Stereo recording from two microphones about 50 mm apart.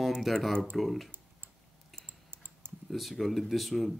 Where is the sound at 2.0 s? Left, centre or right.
Right.